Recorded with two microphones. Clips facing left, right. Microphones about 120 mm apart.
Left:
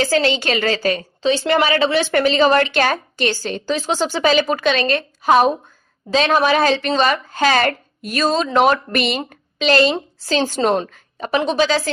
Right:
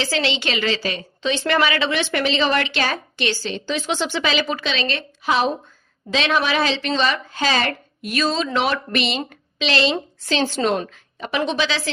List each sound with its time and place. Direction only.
0.0 s a woman's voice: 45° left (ahead or behind)